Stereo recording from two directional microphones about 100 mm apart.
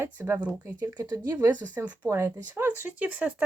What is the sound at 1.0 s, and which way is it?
Speech, 45° right (ahead or behind).